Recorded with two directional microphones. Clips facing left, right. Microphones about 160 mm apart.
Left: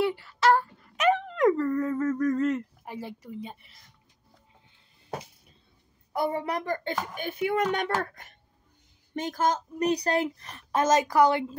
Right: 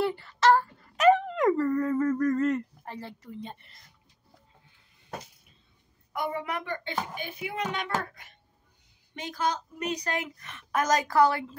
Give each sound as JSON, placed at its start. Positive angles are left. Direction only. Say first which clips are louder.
{"t": 0.0, "sound": "a sound", "louder": "even", "side_deg": 0}
{"t": 2.9, "sound": "speech", "louder": "left 5 dB", "side_deg": 10}
{"t": 6.1, "sound": "a woman's voice", "louder": "left 4 dB", "side_deg": 35}
{"t": 7.2, "sound": "a woman's voice", "louder": "left 7 dB", "side_deg": 50}